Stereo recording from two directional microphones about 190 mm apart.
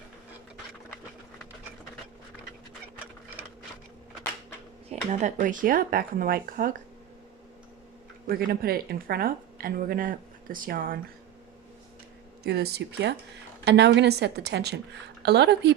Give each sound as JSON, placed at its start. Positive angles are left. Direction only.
{"t": 4.9, "sound": "speech", "side_deg": -40}
{"t": 8.3, "sound": "speech", "side_deg": -50}
{"t": 12.4, "sound": "a woman's voice", "side_deg": -60}